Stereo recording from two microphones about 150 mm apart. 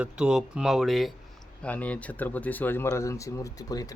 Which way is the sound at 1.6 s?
10° left (ahead or behind).